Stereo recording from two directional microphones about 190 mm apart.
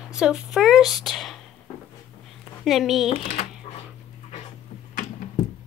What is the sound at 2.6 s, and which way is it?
Speech, centre (ahead or behind).